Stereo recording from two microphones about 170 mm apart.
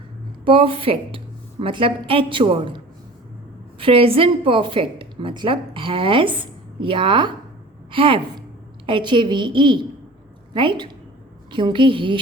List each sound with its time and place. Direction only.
0.4 s a woman's voice: 30° right (ahead or behind)